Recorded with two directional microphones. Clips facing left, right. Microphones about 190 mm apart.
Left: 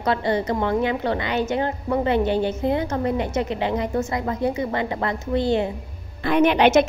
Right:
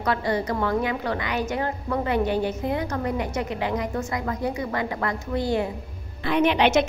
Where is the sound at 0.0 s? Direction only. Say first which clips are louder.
Left 3 dB; 25° left (ahead or behind).